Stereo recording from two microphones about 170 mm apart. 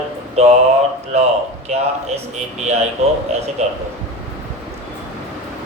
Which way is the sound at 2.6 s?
40° right (ahead or behind).